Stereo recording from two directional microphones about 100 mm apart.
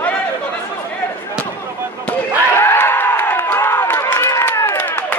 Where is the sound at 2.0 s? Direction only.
25° left (ahead or behind).